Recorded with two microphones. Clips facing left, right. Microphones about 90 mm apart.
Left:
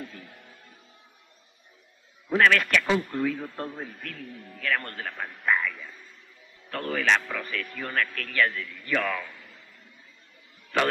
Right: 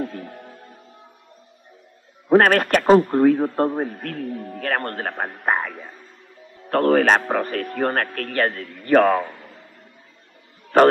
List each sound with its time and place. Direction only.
0.0 s music: 50° right (ahead or behind)
2.2 s speech: 45° right (ahead or behind)
10.7 s a man's voice: 45° right (ahead or behind)